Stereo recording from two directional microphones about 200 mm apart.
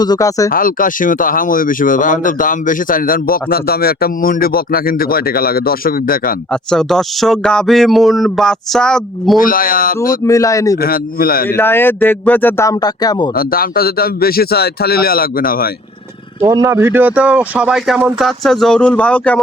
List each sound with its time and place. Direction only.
0.0 s speech: 20° left (ahead or behind)
0.5 s speech: 45° left (ahead or behind)
6.5 s speech: 5° left (ahead or behind)
9.4 s speech: 45° left (ahead or behind)
10.2 s speech: 15° left (ahead or behind)
10.8 s speech: 50° left (ahead or behind)
11.4 s speech: 10° left (ahead or behind)
13.3 s speech: 45° left (ahead or behind)
16.4 s speech: 15° right (ahead or behind); by 19.4 s 5° left (ahead or behind)